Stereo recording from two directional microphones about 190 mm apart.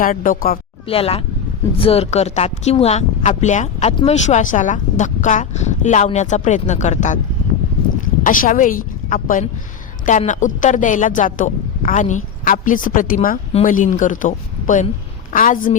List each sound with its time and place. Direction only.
0.0 s a woman's voice: 45° left (ahead or behind)
0.9 s speech: 30° left (ahead or behind)
8.2 s a woman's voice: 45° left (ahead or behind)